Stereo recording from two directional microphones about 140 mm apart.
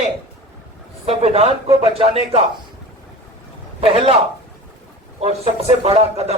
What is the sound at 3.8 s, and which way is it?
Speech, 40° right (ahead or behind).